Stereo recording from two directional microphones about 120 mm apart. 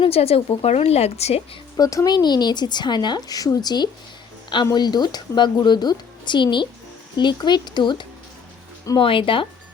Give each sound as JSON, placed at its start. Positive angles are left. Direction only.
{"t": 0.0, "sound": "a woman's voice", "side_deg": 55}
{"t": 1.7, "sound": "speech", "side_deg": 25}